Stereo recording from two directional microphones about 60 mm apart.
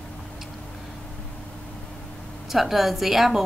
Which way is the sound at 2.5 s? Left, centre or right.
Centre.